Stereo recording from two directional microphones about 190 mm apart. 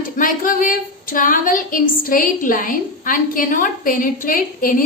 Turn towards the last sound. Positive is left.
turn(degrees=45)  # may be behind; listen again after turning